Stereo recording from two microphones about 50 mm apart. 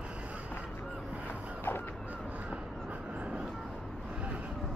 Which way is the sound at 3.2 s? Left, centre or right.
Right.